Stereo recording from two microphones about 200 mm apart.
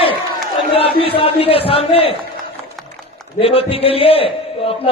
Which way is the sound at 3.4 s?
30° left (ahead or behind).